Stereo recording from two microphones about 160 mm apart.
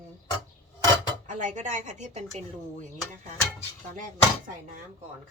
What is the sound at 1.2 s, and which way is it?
Speech, 50° right (ahead or behind).